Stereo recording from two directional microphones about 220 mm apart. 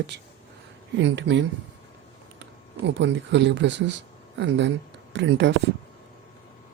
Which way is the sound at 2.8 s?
55° right (ahead or behind).